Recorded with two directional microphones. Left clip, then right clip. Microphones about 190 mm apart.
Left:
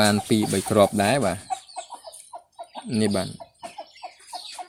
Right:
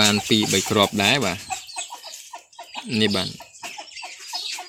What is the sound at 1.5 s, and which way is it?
Chicken, 55° left (ahead or behind).